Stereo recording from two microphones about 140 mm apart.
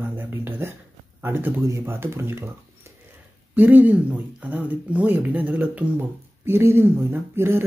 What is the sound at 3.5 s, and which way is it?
Speech, 10° right (ahead or behind).